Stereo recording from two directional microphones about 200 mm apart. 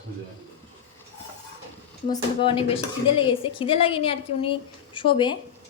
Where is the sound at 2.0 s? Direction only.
25° left (ahead or behind).